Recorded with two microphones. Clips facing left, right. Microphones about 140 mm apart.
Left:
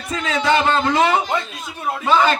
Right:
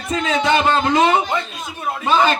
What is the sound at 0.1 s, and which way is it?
A man's voice, 20° right (ahead or behind).